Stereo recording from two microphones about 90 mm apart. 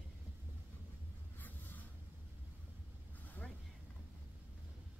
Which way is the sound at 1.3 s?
20° left (ahead or behind).